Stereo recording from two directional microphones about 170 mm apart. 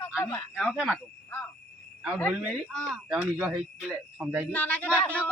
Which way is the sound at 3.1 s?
10° right (ahead or behind).